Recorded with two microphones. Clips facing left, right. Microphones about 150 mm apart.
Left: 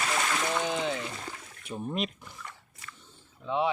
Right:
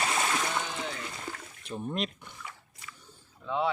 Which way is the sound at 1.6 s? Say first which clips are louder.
Left 1 dB; 5° left (ahead or behind).